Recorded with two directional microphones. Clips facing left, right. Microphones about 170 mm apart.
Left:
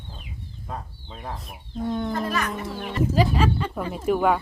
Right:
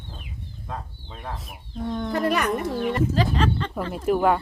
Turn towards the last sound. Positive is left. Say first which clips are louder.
# right 1 dB
turn(degrees=0)  # may be behind; listen again after turning